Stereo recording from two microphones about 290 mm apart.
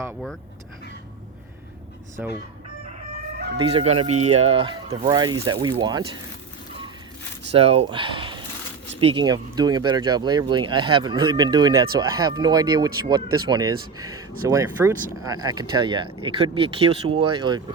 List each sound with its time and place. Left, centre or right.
0.0 s speech: centre
3.6 s speech: centre
7.5 s speech: centre